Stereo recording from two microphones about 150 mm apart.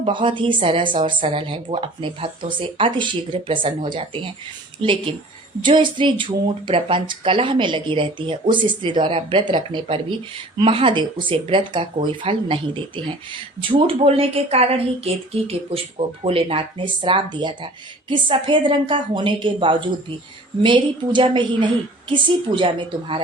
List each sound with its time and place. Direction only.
0.0 s speech: 35° right (ahead or behind)